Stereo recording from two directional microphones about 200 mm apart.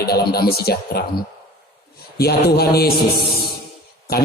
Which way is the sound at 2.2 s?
50° left (ahead or behind).